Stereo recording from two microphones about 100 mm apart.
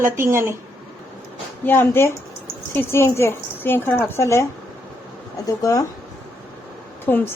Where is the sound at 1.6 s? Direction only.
20° left (ahead or behind).